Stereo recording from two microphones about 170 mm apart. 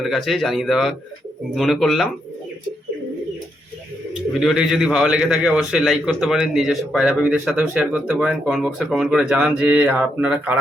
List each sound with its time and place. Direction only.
0.0 s a man's voice: centre (ahead or behind)
4.4 s a man's voice: centre (ahead or behind)